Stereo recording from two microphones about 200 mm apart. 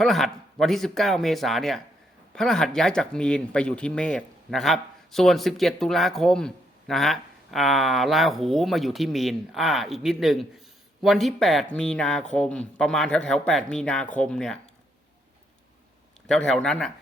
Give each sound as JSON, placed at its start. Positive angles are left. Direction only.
{"t": 0.0, "sound": "speech", "side_deg": 0}
{"t": 16.2, "sound": "speech", "side_deg": 5}